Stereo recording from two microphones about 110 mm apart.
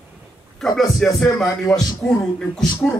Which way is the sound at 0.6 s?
Centre (ahead or behind).